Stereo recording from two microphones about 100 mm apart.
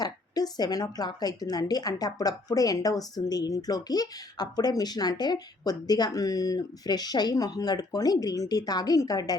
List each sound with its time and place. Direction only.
0.0 s a woman's voice: 40° left (ahead or behind)